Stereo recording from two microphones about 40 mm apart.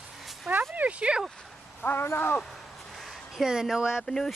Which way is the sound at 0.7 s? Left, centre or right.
Right.